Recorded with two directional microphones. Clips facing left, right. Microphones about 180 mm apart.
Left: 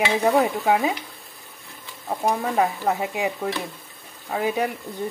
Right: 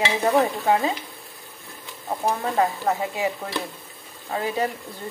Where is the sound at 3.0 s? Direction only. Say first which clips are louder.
Even; 15° left (ahead or behind).